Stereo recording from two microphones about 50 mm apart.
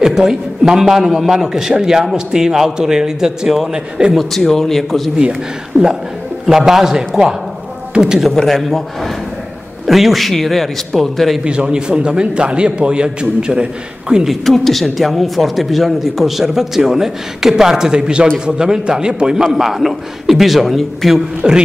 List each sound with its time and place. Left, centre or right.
0.0 s a man's voice: centre
5.7 s speech: right
6.4 s a man's voice: centre
8.1 s speech: centre
11.4 s a man's voice: right
14.2 s a man's voice: centre
21.4 s a man's voice: centre